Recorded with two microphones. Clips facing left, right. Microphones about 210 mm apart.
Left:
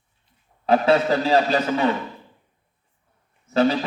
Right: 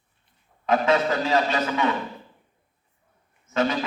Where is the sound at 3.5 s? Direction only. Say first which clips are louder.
Left 5 dB; 35° left (ahead or behind).